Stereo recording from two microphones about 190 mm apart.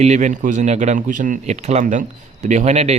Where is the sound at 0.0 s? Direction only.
40° right (ahead or behind).